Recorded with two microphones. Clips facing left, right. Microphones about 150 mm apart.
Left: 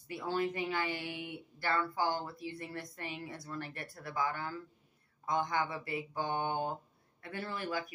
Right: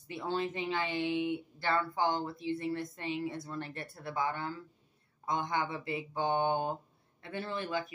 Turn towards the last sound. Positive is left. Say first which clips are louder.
# right 2 dB
turn(degrees=-20)  # may be behind; listen again after turning